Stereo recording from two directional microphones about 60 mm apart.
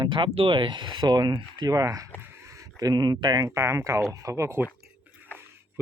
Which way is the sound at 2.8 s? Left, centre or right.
Right.